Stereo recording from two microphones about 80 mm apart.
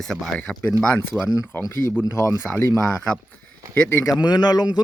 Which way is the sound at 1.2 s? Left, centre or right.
Left.